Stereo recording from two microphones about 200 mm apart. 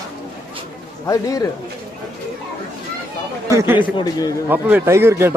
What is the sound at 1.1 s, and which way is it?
Speech, 15° left (ahead or behind).